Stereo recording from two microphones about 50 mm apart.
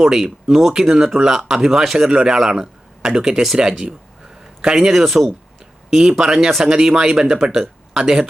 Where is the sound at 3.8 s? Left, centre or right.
Centre.